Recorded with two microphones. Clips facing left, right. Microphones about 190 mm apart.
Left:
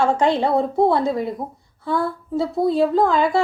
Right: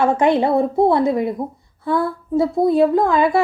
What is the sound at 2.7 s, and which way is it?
Speech, 55° right (ahead or behind).